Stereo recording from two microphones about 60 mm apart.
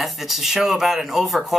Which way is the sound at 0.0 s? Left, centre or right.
Centre.